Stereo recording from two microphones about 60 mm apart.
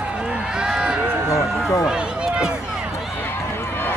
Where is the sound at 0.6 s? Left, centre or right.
Centre.